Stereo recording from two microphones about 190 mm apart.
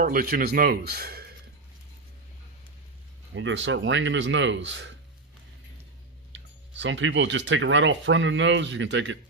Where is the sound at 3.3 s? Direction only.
75° right (ahead or behind).